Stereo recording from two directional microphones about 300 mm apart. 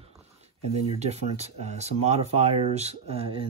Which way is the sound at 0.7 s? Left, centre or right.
Right.